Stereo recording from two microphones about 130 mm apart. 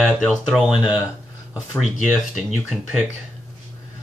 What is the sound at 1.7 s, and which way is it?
Speech, 20° left (ahead or behind).